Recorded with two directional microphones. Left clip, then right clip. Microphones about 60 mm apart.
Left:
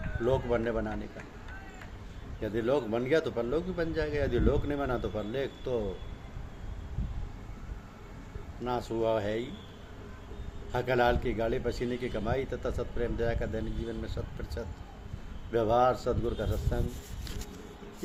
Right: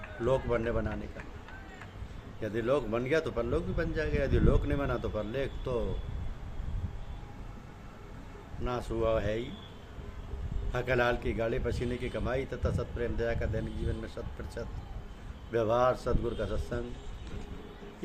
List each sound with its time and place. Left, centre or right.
0.2 s a man's voice: right
2.4 s a man's voice: centre
8.6 s a man's voice: right
10.7 s a man's voice: right